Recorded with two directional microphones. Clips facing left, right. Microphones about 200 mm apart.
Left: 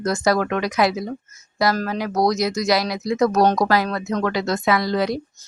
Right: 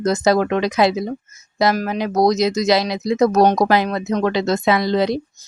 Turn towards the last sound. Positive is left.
turn(degrees=-25)  # may be behind; listen again after turning